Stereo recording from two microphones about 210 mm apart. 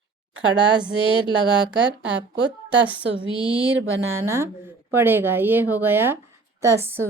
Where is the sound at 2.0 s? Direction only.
60° right (ahead or behind).